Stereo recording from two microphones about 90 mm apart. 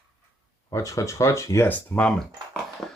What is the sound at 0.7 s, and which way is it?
Speech, 40° left (ahead or behind).